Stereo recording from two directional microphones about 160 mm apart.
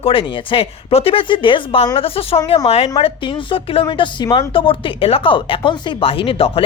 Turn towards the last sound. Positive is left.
turn(degrees=35)  # may be behind; listen again after turning